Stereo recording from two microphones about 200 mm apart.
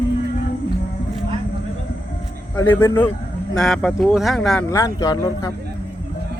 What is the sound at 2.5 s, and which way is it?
Speech, 10° left (ahead or behind).